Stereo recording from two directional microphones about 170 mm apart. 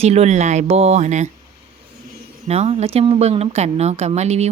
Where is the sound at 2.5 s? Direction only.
40° right (ahead or behind).